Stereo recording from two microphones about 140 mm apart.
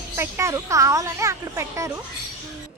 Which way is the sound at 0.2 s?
20° right (ahead or behind).